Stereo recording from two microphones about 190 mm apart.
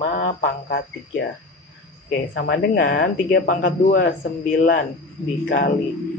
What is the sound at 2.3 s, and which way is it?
Speech, 55° left (ahead or behind).